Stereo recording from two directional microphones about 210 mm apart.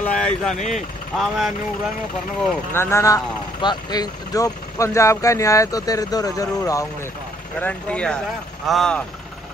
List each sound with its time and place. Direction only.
0.0 s vehicle: 5° left (ahead or behind)
1.1 s speech: centre (ahead or behind)
2.7 s speech: 10° left (ahead or behind)
7.6 s speech: 5° left (ahead or behind)